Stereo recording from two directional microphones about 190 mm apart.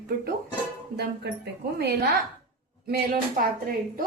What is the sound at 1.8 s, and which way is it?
A woman's voice, 60° right (ahead or behind).